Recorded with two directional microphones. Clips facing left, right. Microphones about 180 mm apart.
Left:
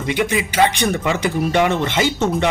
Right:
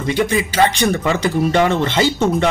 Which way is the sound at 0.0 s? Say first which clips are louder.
Right 2 dB; 20° left (ahead or behind).